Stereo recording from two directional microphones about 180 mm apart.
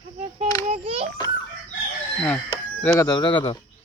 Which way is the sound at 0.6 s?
35° right (ahead or behind).